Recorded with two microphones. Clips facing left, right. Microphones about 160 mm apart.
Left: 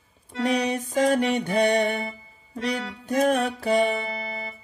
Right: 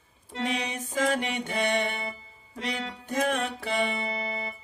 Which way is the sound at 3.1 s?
40° left (ahead or behind).